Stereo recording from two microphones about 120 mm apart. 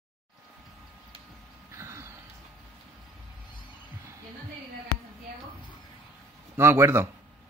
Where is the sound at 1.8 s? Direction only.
25° right (ahead or behind).